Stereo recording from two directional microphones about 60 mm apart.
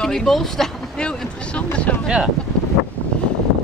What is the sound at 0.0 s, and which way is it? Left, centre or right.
Speech, centre.